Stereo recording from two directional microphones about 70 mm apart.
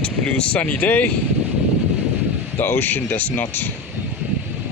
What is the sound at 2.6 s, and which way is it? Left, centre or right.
Speech, left.